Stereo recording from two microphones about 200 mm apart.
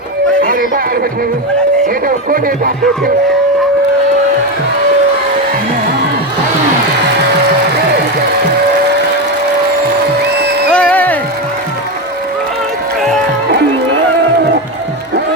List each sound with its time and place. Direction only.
0.4 s a sound: 45° right (ahead or behind)
1.9 s speech: 45° right (ahead or behind)
10.7 s music: 5° left (ahead or behind)